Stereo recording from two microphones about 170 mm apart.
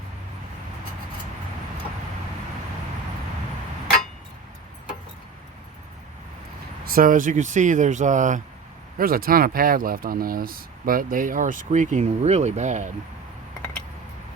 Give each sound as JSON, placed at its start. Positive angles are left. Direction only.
{"t": 6.8, "sound": "speech", "side_deg": -55}
{"t": 9.0, "sound": "speech", "side_deg": -60}